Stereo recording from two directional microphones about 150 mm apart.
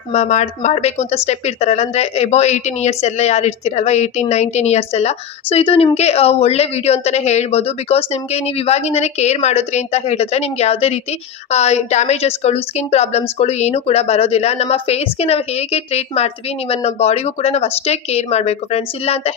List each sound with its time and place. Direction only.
0.1 s a woman's voice: 50° left (ahead or behind)